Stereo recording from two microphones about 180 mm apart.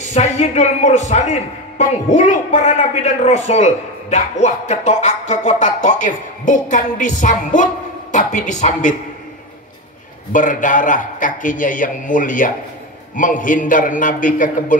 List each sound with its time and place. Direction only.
0.1 s a man's voice: 40° left (ahead or behind)
10.3 s a man's voice: 45° left (ahead or behind)